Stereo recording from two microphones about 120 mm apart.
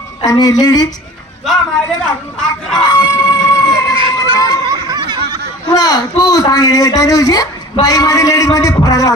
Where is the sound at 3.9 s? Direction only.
35° right (ahead or behind).